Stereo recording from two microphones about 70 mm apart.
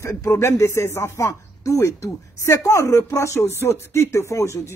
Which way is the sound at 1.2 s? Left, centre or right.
Left.